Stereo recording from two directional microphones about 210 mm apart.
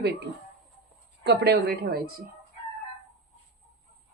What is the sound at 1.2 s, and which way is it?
Speech, 50° right (ahead or behind).